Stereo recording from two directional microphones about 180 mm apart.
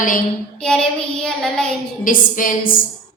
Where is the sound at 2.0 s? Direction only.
50° left (ahead or behind).